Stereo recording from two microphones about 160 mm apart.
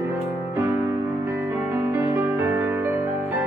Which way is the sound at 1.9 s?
15° right (ahead or behind).